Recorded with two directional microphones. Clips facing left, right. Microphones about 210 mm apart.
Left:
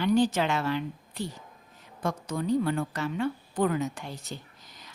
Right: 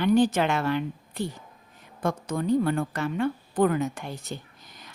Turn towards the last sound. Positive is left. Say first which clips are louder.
# right 2 dB
turn(degrees=-55)  # may be behind; listen again after turning